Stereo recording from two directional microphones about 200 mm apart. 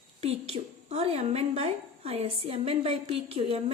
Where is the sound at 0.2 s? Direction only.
30° right (ahead or behind).